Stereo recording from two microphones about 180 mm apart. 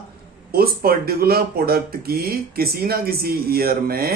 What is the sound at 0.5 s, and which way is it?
Speech, 55° right (ahead or behind).